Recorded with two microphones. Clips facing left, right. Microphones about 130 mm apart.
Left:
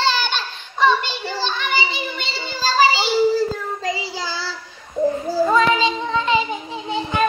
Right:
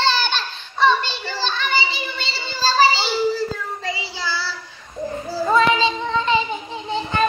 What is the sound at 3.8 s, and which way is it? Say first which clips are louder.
Child singing: left 3 dB; 45° left (ahead or behind).